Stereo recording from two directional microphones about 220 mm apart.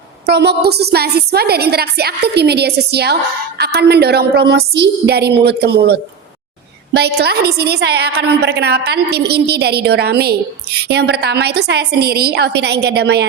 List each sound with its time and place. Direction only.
0.3 s a woman's voice: 50° right (ahead or behind)